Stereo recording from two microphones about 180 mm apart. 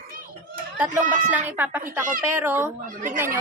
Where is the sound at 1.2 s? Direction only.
10° right (ahead or behind).